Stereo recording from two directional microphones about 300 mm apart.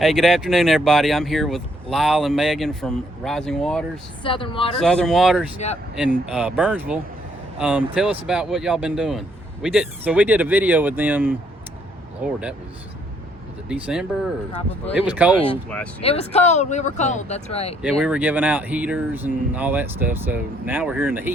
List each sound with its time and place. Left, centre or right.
0.0 s speech: centre
4.2 s speech: centre
4.8 s speech: centre
5.5 s speech: left
6.2 s speech: centre
13.8 s speech: centre
16.0 s speech: centre
18.0 s speech: centre